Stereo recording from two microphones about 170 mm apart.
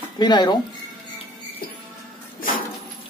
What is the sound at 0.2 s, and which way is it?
Speech, 25° left (ahead or behind).